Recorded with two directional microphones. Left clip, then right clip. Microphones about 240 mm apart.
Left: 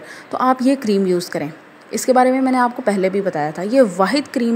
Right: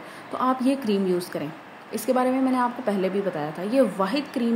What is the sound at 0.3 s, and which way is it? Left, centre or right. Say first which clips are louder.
A woman's voice: left 7 dB; left.